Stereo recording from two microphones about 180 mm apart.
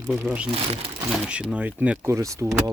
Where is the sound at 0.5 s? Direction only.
35° right (ahead or behind).